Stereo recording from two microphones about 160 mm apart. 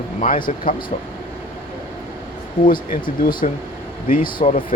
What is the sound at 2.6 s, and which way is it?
Speech, 60° left (ahead or behind).